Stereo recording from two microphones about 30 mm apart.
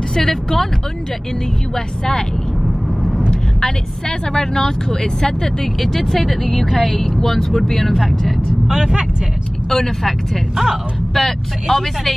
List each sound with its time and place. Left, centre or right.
0.3 s speech: centre
2.6 s vehicle: centre
4.3 s speech: centre
5.8 s speech: centre
7.4 s speech: centre
8.6 s speech: right
9.7 s speech: centre
10.5 s speech: centre
11.1 s speech: centre